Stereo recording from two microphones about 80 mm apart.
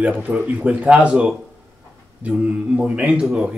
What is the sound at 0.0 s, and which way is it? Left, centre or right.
A man's voice, centre.